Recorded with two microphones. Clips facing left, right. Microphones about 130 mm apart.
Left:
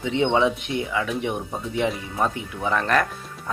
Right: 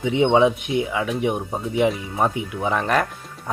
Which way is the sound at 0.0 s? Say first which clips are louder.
Right 4 dB; 15° right (ahead or behind).